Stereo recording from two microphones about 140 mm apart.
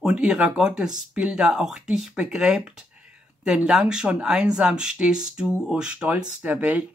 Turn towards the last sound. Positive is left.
turn(degrees=-10)  # may be behind; listen again after turning